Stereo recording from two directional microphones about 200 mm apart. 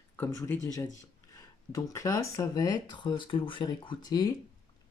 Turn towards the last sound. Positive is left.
turn(degrees=20)  # may be behind; listen again after turning